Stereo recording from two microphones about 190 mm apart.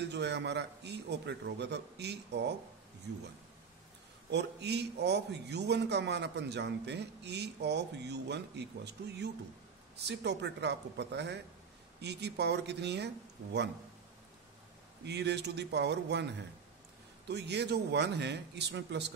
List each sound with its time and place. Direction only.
0.0 s a man's voice: 65° right (ahead or behind)
4.3 s a man's voice: 65° right (ahead or behind)
15.0 s a man's voice: 60° right (ahead or behind)